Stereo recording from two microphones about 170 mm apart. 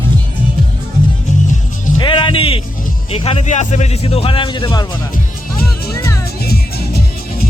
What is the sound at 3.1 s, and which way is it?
Speech, 35° left (ahead or behind).